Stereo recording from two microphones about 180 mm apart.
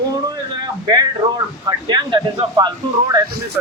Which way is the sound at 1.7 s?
25° right (ahead or behind).